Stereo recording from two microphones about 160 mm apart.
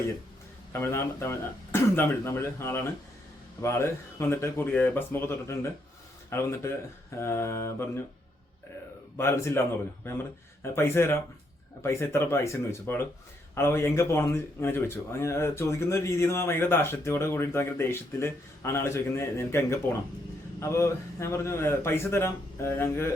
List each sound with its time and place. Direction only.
0.7 s speech: 15° left (ahead or behind)
9.1 s speech: 15° left (ahead or behind)